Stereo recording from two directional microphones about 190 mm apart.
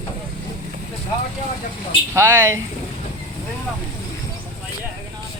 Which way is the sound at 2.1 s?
15° right (ahead or behind).